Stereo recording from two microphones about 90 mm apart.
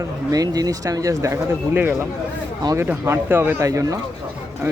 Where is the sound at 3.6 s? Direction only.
35° right (ahead or behind).